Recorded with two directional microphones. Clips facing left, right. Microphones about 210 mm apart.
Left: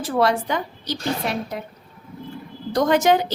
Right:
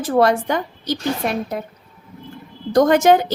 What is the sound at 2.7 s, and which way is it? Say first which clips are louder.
Speech: right 5 dB; 50° right (ahead or behind).